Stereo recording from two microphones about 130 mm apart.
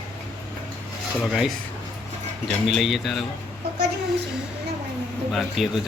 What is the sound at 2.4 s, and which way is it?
Speech, centre (ahead or behind).